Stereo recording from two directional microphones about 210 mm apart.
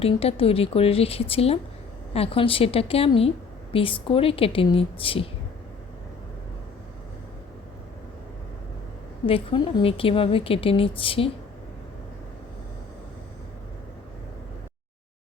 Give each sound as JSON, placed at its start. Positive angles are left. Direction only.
{"t": 0.0, "sound": "a woman's voice", "side_deg": 25}
{"t": 9.2, "sound": "a woman's voice", "side_deg": 25}